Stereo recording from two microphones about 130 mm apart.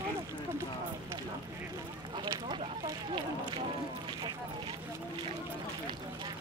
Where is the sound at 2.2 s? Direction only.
35° right (ahead or behind).